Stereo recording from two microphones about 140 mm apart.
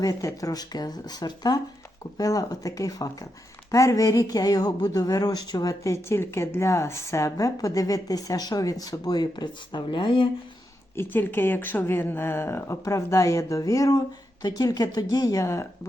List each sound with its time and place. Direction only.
0.0 s speech: 25° left (ahead or behind)
10.9 s speech: 15° left (ahead or behind)